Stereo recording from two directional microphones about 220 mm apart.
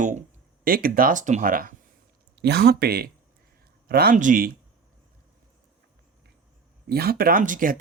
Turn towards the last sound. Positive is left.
turn(degrees=-40)  # may be behind; listen again after turning